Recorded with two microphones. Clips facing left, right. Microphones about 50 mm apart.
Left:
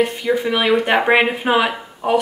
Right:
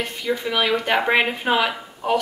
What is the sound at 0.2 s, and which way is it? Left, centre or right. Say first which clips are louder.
Speech: left 4 dB; centre.